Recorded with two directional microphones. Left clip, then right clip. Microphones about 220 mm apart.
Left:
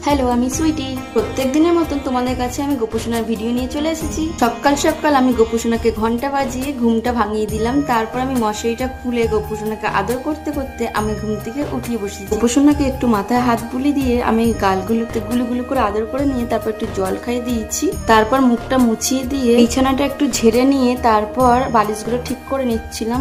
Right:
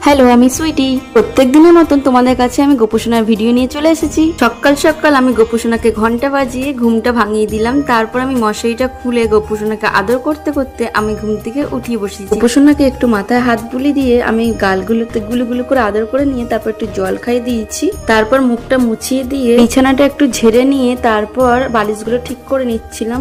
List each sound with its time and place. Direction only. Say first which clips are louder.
0.0 s a woman's voice: right 9 dB; 35° right (ahead or behind)
4.4 s a woman's voice: right 1 dB; 15° right (ahead or behind)
15.3 s speech: right 4 dB; centre (ahead or behind)
15.7 s a woman's voice: right 6 dB; 15° right (ahead or behind)
19.5 s a woman's voice: right 7 dB; 15° right (ahead or behind)